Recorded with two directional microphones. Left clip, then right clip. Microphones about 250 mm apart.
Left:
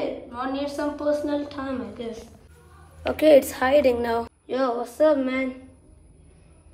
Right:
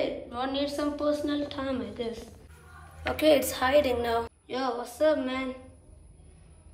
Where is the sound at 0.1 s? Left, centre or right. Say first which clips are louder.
Left 2 dB; centre.